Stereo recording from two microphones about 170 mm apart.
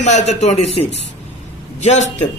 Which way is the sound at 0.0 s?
45° left (ahead or behind).